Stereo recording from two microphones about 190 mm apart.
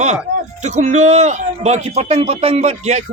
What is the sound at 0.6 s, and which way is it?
A man's voice, 40° right (ahead or behind).